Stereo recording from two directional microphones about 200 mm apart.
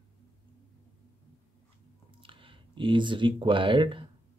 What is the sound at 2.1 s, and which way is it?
Speech, 25° right (ahead or behind).